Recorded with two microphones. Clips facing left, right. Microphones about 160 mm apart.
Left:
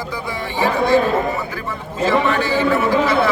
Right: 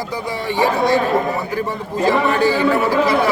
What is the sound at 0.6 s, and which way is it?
Speech, 40° right (ahead or behind).